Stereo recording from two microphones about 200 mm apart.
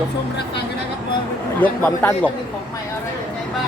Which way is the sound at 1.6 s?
10° left (ahead or behind).